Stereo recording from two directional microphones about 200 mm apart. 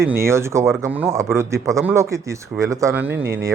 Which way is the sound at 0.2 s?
15° right (ahead or behind).